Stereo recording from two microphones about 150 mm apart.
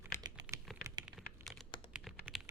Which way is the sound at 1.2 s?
Centre (ahead or behind).